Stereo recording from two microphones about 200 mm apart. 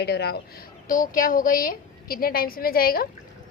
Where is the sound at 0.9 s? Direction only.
45° left (ahead or behind).